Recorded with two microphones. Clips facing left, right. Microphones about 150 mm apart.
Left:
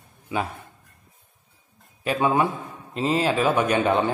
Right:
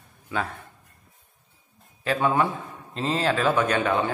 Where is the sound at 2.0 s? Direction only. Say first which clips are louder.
Left 1 dB; 15° left (ahead or behind).